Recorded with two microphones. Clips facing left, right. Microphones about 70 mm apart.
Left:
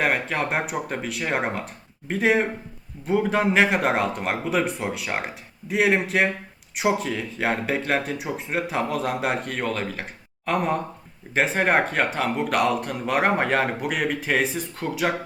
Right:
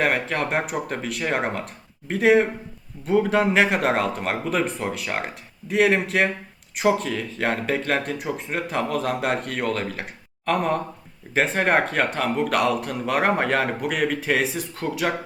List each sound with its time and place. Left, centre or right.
0.0 s speech: centre